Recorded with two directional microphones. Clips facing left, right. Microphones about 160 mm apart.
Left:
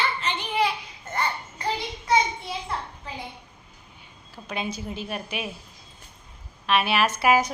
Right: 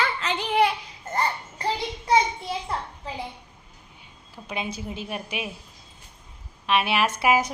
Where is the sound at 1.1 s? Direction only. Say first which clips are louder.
Right 2 dB; 35° right (ahead or behind).